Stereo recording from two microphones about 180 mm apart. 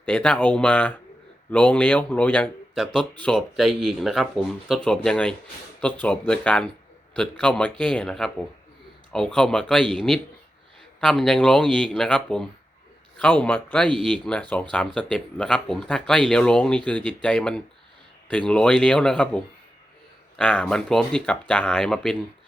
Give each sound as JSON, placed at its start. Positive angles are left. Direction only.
{"t": 0.0, "sound": "speech", "side_deg": 5}
{"t": 20.4, "sound": "speech", "side_deg": 5}